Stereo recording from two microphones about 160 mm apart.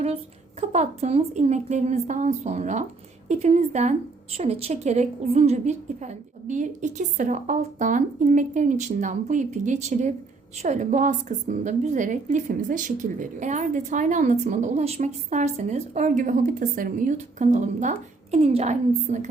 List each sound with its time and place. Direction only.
0.7 s a woman's voice: 45° right (ahead or behind)